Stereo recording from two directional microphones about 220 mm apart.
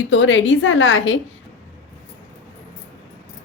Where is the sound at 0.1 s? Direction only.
60° left (ahead or behind).